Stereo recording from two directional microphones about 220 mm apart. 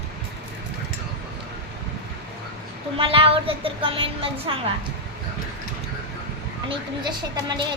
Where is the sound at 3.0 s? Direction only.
25° right (ahead or behind).